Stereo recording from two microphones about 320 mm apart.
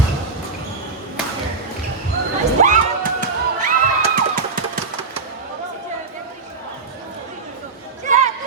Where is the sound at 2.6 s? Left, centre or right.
Right.